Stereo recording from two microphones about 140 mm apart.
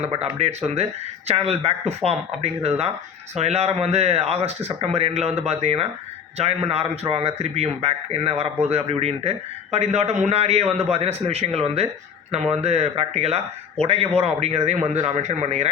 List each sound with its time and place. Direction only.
0.0 s a man's voice: 50° right (ahead or behind)